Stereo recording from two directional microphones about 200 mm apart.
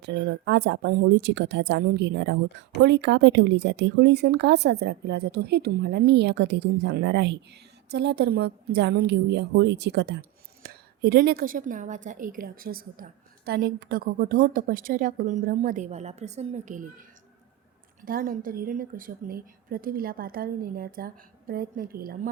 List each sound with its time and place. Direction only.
0.0 s a woman's voice: 60° right (ahead or behind); by 16.9 s 40° right (ahead or behind)
18.0 s a woman's voice: 45° right (ahead or behind)